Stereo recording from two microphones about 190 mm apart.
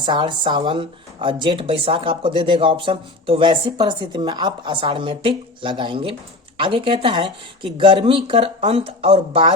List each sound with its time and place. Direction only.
0.0 s speech: 25° right (ahead or behind)